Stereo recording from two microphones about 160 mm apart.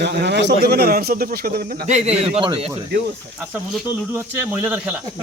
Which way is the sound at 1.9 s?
40° right (ahead or behind).